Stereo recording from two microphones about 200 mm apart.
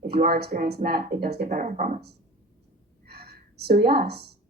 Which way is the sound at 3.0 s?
50° right (ahead or behind).